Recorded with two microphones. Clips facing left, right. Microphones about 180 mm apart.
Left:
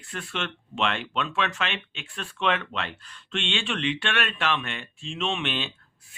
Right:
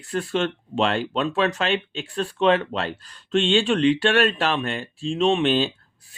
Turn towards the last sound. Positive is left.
turn(degrees=-35)  # may be behind; listen again after turning